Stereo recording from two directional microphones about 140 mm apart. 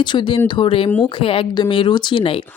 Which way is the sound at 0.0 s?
35° left (ahead or behind).